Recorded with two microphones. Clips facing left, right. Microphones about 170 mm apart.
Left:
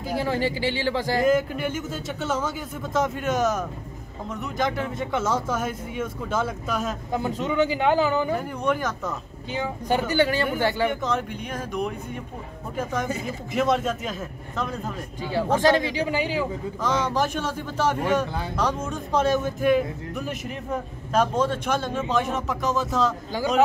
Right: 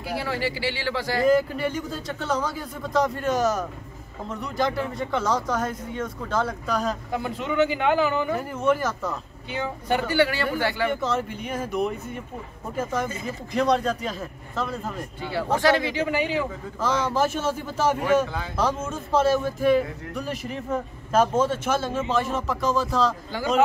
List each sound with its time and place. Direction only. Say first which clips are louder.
0.1 s a man's voice: left 3 dB; 20° left (ahead or behind)
1.2 s speech: right 3 dB; centre (ahead or behind)
7.2 s a man's voice: even; 15° left (ahead or behind)
8.4 s speech: right 2 dB; 5° right (ahead or behind)
9.6 s speech: left 1 dB; 20° left (ahead or behind)
10.9 s speech: right 1 dB; centre (ahead or behind)
15.2 s a man's voice: left 1 dB; 15° left (ahead or behind)
17.1 s speech: right 2 dB; 5° right (ahead or behind)